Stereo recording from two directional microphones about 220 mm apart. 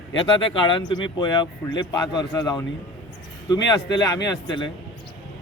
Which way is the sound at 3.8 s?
15° left (ahead or behind).